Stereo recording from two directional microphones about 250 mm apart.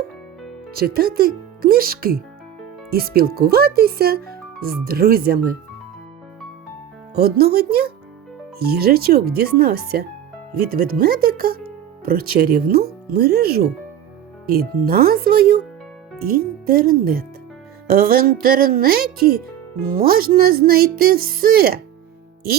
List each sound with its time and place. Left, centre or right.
0.7 s speech: right
7.2 s speech: right